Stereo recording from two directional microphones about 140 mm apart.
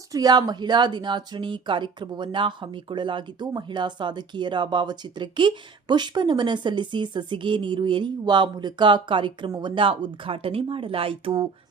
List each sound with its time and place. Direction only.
0.1 s speech: 25° right (ahead or behind)